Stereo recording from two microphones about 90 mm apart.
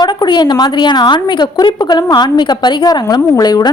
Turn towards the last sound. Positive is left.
turn(degrees=50)  # may be behind; listen again after turning